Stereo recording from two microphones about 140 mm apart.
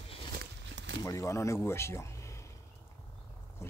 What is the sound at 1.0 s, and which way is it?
Speech, 25° left (ahead or behind).